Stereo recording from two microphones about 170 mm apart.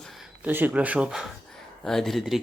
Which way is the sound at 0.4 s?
10° right (ahead or behind).